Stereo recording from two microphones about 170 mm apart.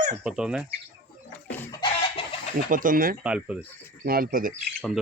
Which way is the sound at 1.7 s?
30° left (ahead or behind).